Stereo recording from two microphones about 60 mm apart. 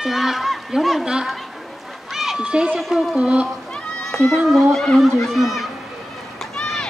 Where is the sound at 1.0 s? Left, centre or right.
Centre.